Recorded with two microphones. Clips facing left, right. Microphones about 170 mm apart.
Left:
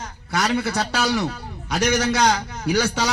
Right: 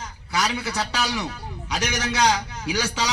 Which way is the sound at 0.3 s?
55° left (ahead or behind).